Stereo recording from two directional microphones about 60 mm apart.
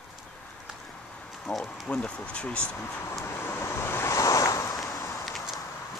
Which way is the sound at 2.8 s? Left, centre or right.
Left.